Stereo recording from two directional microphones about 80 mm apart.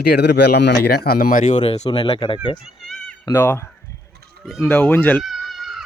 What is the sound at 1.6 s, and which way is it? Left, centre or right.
Speech, left.